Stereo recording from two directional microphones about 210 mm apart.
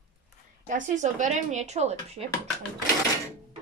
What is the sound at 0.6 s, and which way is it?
Speech, 35° right (ahead or behind).